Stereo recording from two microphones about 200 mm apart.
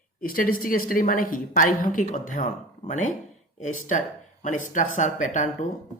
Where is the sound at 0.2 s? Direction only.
45° left (ahead or behind).